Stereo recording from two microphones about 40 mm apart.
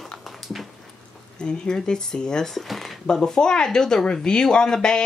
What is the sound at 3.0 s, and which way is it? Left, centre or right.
Speech, centre.